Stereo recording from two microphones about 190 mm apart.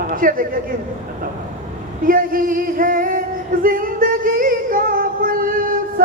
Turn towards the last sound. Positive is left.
turn(degrees=-45)  # may be behind; listen again after turning